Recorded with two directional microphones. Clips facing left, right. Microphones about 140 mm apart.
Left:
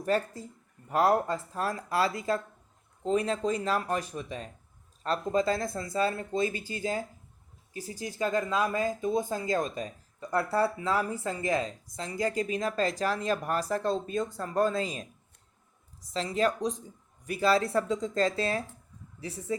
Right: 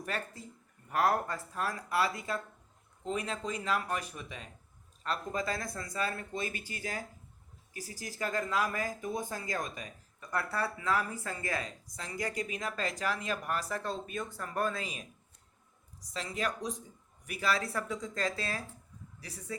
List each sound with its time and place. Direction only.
0.0 s speech: 35° left (ahead or behind)
16.1 s speech: 25° left (ahead or behind)